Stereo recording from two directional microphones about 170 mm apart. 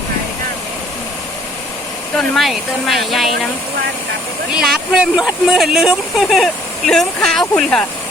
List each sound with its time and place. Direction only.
2.1 s speech: centre (ahead or behind)
4.5 s speech: 5° right (ahead or behind)